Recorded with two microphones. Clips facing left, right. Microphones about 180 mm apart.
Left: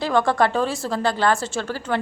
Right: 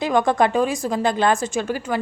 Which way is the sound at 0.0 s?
15° right (ahead or behind).